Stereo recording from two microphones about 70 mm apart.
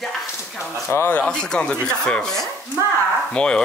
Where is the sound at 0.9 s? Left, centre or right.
Left.